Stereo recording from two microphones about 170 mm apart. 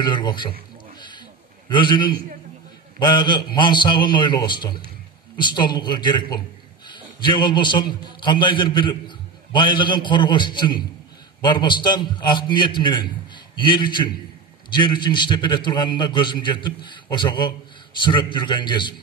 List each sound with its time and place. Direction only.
0.0 s a man's voice: 25° left (ahead or behind)
0.9 s a sound: 25° left (ahead or behind)
1.7 s a man's voice: 25° left (ahead or behind)